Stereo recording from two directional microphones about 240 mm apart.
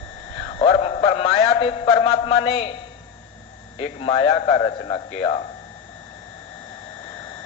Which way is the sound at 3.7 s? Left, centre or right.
Left.